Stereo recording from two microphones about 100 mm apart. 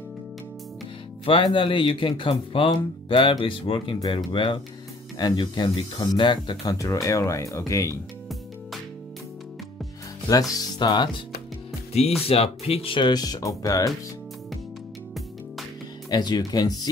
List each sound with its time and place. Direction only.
1.2 s speech: 55° left (ahead or behind)
6.6 s speech: 35° left (ahead or behind)
10.5 s speech: 40° left (ahead or behind)
12.3 s speech: 80° left; by 13.1 s 60° left (ahead or behind)
13.1 s speech: 40° left (ahead or behind)
16.1 s speech: 45° left (ahead or behind)